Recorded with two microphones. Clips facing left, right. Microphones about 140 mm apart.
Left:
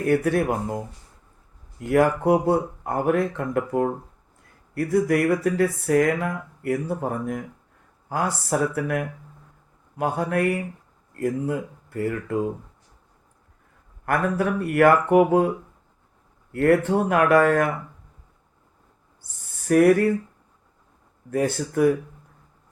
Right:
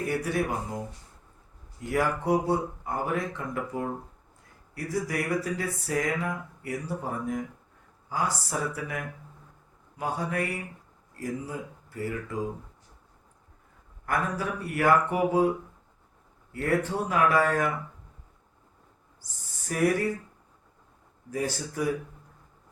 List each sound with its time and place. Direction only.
0.0 s speech: 55° left (ahead or behind)
1.8 s speech: 55° left (ahead or behind)
14.0 s speech: 60° left (ahead or behind)
19.5 s speech: 60° left (ahead or behind)
21.2 s speech: 60° left (ahead or behind)